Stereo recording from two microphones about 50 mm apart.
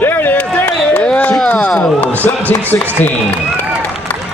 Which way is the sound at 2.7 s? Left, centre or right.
Left.